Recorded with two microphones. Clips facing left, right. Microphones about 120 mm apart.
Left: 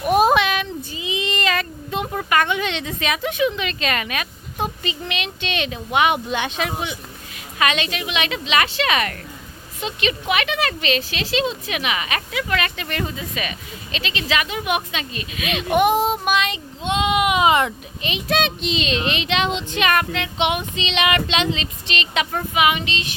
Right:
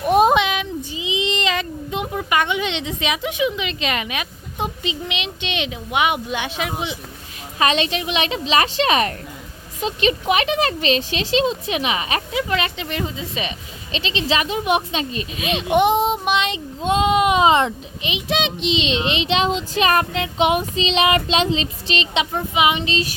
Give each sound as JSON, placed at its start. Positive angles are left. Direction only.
{"t": 0.0, "sound": "a sound", "side_deg": -20}
{"t": 4.6, "sound": "speech", "side_deg": -15}
{"t": 7.6, "sound": "a child's voice", "side_deg": -30}
{"t": 15.7, "sound": "child singing", "side_deg": -25}
{"t": 16.9, "sound": "a child's voice", "side_deg": -35}
{"t": 22.3, "sound": "child singing", "side_deg": -20}